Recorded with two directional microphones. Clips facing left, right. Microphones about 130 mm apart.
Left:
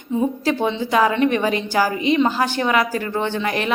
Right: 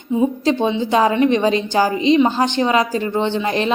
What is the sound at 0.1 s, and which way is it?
A woman's voice, 20° right (ahead or behind).